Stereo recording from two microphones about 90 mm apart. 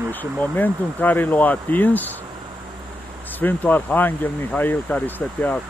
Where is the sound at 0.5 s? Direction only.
20° left (ahead or behind).